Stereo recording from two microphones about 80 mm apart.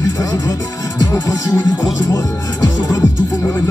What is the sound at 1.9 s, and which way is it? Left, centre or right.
Speech, left.